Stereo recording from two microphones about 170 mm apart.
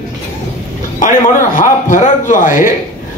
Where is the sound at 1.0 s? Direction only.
50° left (ahead or behind).